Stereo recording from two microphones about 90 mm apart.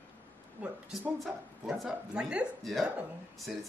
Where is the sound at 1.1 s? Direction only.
5° right (ahead or behind).